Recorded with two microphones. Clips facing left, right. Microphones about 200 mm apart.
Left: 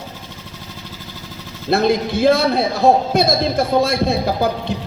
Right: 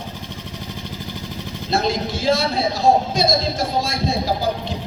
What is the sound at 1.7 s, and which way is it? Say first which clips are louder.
A man's voice: left 5 dB; 60° left (ahead or behind).